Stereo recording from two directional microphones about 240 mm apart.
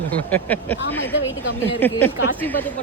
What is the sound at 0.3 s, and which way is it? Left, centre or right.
Speech, centre.